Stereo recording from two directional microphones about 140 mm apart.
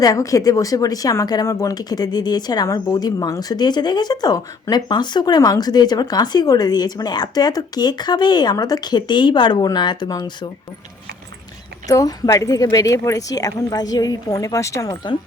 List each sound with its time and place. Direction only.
0.0 s speech: 25° left (ahead or behind)
11.9 s speech: 25° left (ahead or behind)